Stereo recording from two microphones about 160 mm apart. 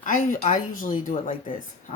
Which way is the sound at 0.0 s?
50° left (ahead or behind).